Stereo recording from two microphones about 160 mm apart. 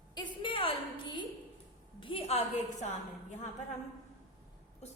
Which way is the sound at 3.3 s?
45° left (ahead or behind).